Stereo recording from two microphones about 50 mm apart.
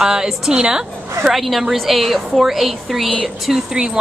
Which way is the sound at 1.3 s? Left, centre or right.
Centre.